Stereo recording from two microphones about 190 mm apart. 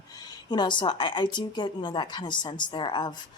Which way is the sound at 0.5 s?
25° left (ahead or behind).